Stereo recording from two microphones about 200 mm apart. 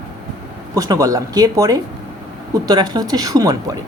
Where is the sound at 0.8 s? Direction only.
15° right (ahead or behind).